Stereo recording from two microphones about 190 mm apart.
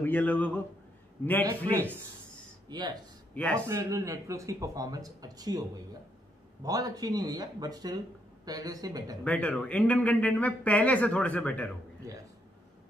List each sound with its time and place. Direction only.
0.0 s speech: 10° left (ahead or behind)
2.7 s speech: 20° right (ahead or behind)
3.3 s speech: 5° left (ahead or behind)
3.6 s speech: 15° right (ahead or behind)
6.6 s speech: 20° right (ahead or behind)
9.2 s speech: 5° left (ahead or behind)